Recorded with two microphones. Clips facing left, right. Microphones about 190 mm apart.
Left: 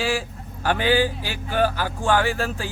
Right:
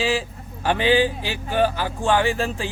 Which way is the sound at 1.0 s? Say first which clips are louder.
Right 2 dB; 45° left (ahead or behind).